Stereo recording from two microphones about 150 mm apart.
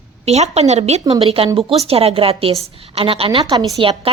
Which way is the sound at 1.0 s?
35° right (ahead or behind).